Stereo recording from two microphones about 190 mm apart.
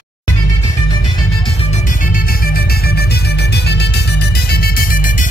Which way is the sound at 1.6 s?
40° left (ahead or behind).